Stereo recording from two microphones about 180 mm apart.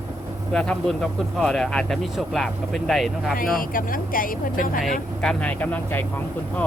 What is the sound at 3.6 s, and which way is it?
Speech, 50° left (ahead or behind).